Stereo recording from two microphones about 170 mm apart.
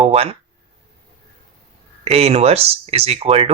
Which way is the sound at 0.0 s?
35° right (ahead or behind).